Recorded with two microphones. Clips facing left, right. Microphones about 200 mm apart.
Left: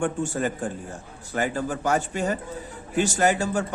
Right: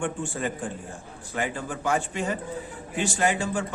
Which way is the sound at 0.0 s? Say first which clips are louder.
Left 4 dB; 45° left (ahead or behind).